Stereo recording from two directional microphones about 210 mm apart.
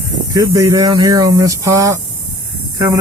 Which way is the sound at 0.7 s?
20° right (ahead or behind).